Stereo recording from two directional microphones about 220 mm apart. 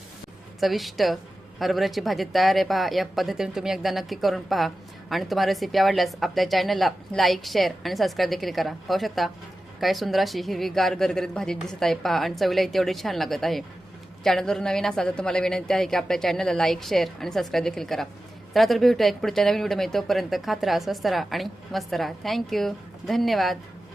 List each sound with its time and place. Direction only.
0.6 s a woman's voice: centre (ahead or behind)